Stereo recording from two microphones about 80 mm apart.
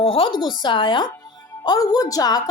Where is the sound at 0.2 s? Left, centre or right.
Left.